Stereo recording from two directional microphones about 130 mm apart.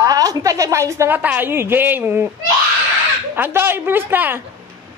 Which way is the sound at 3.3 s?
15° right (ahead or behind).